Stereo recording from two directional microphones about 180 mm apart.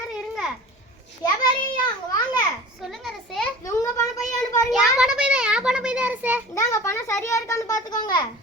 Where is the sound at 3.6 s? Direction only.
15° left (ahead or behind).